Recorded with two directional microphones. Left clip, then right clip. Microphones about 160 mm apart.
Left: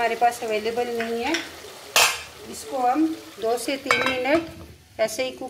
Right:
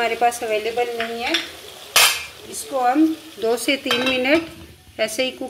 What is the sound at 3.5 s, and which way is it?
Speech, 25° right (ahead or behind).